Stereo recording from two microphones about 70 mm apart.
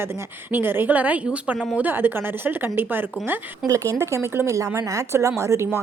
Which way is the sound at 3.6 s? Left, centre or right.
Right.